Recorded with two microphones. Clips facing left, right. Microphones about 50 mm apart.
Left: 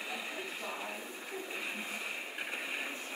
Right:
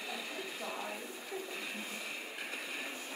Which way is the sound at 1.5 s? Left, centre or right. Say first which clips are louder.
Left 2 dB; left.